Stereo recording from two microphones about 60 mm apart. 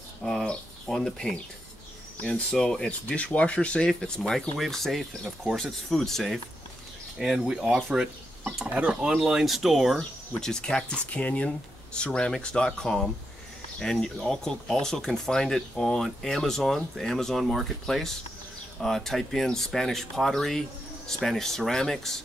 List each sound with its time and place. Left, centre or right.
0.2 s bird: centre
2.3 s speech: centre
7.2 s speech: centre
9.9 s speech: centre